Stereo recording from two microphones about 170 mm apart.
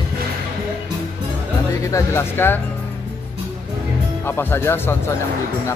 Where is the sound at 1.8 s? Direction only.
15° left (ahead or behind).